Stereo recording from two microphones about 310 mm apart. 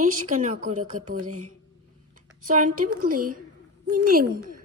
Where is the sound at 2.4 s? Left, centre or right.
Right.